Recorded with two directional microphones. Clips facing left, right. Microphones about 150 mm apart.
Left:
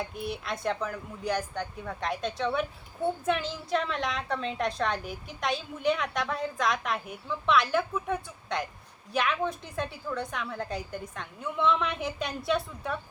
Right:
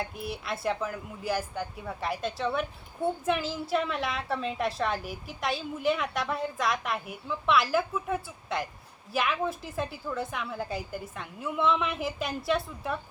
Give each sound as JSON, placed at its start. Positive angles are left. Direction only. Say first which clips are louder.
{"t": 0.2, "sound": "speech", "louder": "left 1 dB", "side_deg": 0}